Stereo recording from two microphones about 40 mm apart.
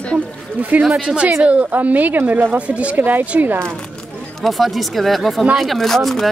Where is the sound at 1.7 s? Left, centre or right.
Right.